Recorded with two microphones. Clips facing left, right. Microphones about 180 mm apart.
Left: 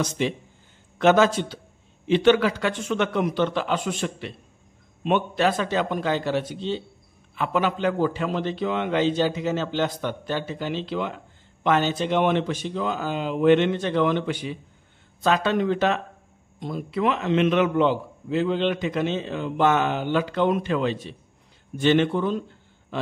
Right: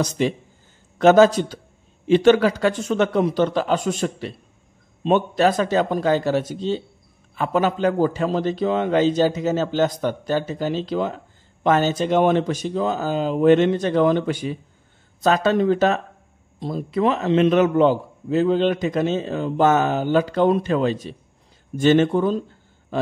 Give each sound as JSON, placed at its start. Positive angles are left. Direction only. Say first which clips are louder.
{"t": 0.0, "sound": "a man's voice", "louder": "right 4 dB", "side_deg": -40}